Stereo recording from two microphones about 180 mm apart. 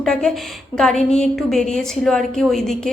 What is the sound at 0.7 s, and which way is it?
A woman's voice, 5° left (ahead or behind).